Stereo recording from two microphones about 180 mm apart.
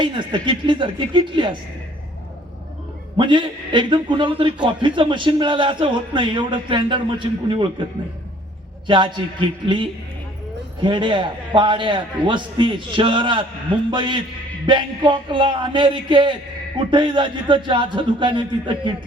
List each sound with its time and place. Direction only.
0.0 s a man's voice: 25° right (ahead or behind)
3.2 s a man's voice: 25° right (ahead or behind)
8.9 s a man's voice: 25° right (ahead or behind)